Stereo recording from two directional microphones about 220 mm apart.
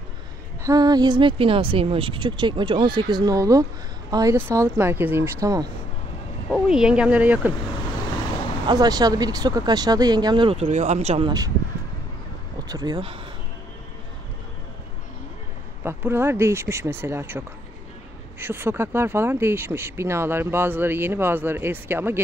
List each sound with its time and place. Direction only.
0.7 s speech: 20° right (ahead or behind)
6.5 s speech: 5° right (ahead or behind)
8.6 s speech: 15° right (ahead or behind)
12.6 s speech: 20° right (ahead or behind)
15.8 s speech: 10° right (ahead or behind)
18.4 s speech: 10° right (ahead or behind)